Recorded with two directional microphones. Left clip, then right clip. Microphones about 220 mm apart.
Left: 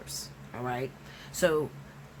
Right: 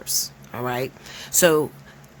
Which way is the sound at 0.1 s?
45° right (ahead or behind).